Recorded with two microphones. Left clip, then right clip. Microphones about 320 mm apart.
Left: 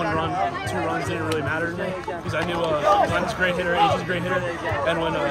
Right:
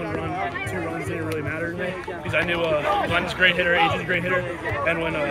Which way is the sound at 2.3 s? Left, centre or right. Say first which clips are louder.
Right 2 dB; centre.